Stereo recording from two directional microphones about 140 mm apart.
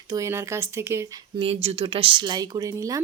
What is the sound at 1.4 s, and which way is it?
Speech, 45° right (ahead or behind).